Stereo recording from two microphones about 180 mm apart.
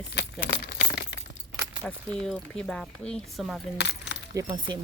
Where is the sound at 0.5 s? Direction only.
65° left (ahead or behind).